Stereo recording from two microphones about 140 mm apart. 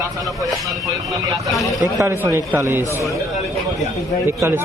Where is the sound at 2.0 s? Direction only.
20° right (ahead or behind).